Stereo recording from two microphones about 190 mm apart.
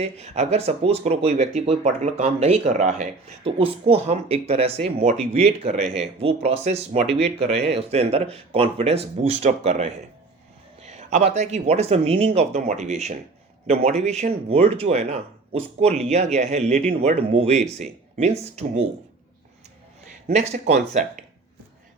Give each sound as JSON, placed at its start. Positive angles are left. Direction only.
{"t": 0.0, "sound": "speech", "side_deg": -35}
{"t": 20.3, "sound": "speech", "side_deg": -35}